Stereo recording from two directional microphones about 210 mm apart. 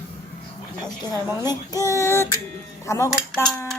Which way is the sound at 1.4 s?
15° left (ahead or behind).